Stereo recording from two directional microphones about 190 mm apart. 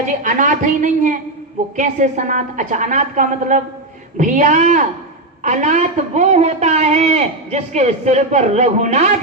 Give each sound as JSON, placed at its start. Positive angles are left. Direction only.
{"t": 0.2, "sound": "a woman's voice", "side_deg": -45}